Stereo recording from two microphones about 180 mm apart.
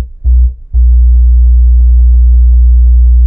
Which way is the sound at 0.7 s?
Centre (ahead or behind).